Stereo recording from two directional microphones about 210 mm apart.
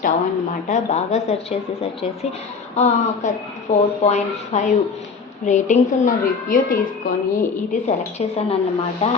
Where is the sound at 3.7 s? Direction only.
35° left (ahead or behind).